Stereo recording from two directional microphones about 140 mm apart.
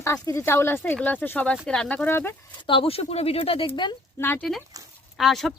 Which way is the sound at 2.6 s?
40° left (ahead or behind).